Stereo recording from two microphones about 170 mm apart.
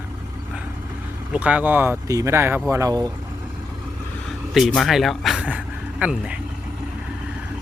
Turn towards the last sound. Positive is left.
turn(degrees=-5)  # may be behind; listen again after turning